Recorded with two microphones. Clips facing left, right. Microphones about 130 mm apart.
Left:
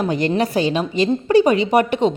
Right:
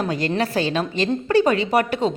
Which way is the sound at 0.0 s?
20° left (ahead or behind).